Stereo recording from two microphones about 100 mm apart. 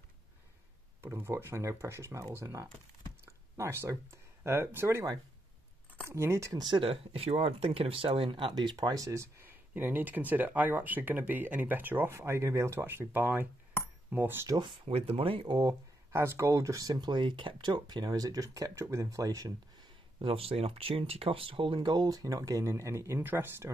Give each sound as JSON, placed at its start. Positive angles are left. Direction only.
{"t": 1.0, "sound": "speech", "side_deg": -25}
{"t": 6.0, "sound": "speech", "side_deg": -25}
{"t": 6.8, "sound": "speech", "side_deg": -75}
{"t": 14.6, "sound": "speech", "side_deg": -50}
{"t": 15.0, "sound": "speech", "side_deg": -70}
{"t": 15.4, "sound": "speech", "side_deg": -45}
{"t": 16.1, "sound": "speech", "side_deg": -25}
{"t": 20.2, "sound": "speech", "side_deg": -70}